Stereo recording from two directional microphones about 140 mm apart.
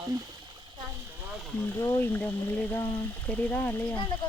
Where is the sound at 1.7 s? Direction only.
20° left (ahead or behind).